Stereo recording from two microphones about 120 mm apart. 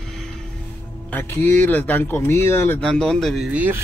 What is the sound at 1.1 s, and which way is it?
Speech, 20° left (ahead or behind).